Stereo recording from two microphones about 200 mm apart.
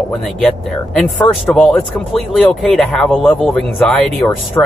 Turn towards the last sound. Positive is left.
turn(degrees=10)  # may be behind; listen again after turning